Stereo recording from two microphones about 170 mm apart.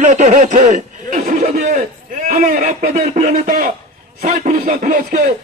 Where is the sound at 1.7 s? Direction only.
55° right (ahead or behind).